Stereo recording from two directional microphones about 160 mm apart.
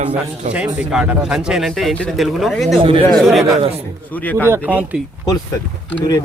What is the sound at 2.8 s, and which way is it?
Speech, 35° right (ahead or behind).